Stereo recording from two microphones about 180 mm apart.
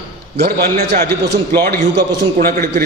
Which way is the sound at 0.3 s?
60° right (ahead or behind).